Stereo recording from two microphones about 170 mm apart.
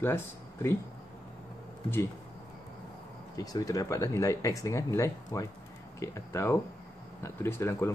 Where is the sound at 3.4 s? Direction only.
20° left (ahead or behind).